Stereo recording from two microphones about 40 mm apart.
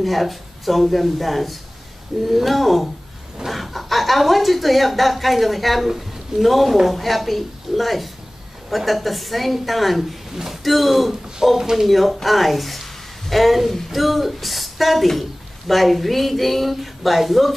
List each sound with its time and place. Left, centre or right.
0.0 s speech: centre